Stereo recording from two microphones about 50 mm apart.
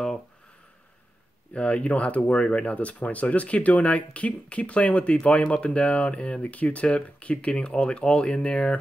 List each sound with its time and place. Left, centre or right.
1.5 s speech: left